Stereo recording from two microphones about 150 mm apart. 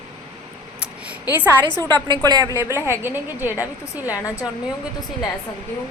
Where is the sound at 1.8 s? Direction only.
25° right (ahead or behind).